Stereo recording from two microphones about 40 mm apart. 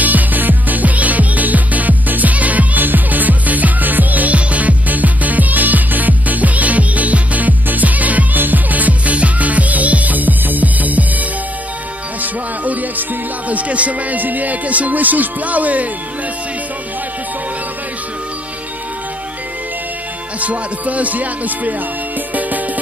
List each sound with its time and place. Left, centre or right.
0.0 s music: right
20.3 s music: right